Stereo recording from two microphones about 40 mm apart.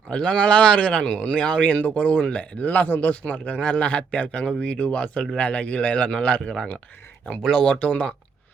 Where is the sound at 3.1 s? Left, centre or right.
Left.